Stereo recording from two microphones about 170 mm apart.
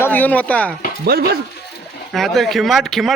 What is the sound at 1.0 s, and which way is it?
Speech, 70° right (ahead or behind).